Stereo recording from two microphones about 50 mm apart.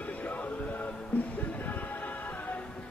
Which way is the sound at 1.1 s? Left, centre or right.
Left.